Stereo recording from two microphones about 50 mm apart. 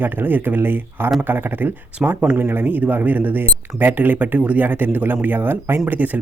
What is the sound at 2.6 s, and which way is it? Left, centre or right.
Speech, right.